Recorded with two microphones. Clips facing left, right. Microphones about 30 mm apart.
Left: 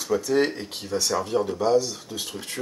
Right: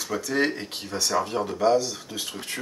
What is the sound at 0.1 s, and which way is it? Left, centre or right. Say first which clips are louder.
Speech: left 3 dB; centre.